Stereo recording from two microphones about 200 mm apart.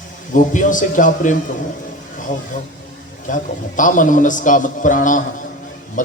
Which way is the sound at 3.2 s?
40° left (ahead or behind).